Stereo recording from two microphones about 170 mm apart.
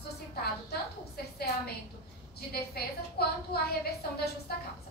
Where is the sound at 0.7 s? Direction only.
70° left (ahead or behind).